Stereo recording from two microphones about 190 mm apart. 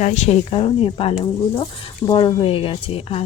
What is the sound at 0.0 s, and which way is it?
Speech, 35° left (ahead or behind).